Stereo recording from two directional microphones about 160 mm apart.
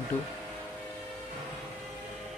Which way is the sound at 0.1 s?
10° left (ahead or behind).